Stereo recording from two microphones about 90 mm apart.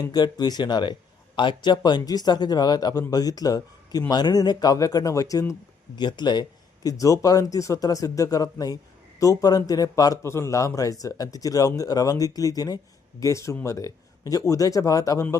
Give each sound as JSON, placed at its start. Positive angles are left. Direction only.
{"t": 0.0, "sound": "speech", "side_deg": 50}
{"t": 6.0, "sound": "speech", "side_deg": 55}
{"t": 7.0, "sound": "speech", "side_deg": 40}